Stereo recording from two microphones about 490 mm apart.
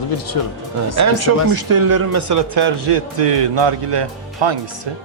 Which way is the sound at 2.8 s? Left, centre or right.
Right.